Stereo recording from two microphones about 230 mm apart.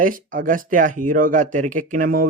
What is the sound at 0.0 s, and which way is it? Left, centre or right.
Speech, right.